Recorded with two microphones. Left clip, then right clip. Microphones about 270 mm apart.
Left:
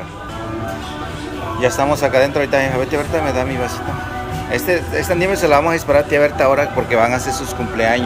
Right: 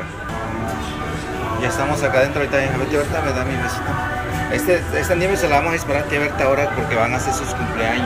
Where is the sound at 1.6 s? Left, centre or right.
Centre.